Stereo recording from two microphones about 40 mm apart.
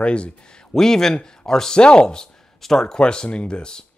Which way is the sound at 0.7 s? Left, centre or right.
Centre.